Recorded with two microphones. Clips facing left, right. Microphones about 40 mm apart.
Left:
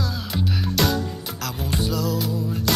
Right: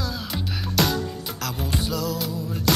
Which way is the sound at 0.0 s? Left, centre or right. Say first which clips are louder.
Left 3 dB; centre.